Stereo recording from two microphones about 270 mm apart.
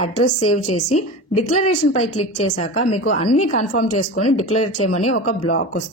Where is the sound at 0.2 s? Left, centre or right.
Left.